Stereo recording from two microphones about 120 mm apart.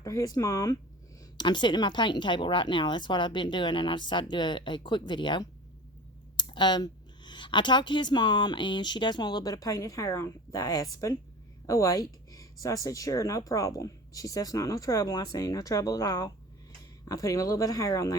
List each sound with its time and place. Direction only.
0.0 s speech: 30° left (ahead or behind)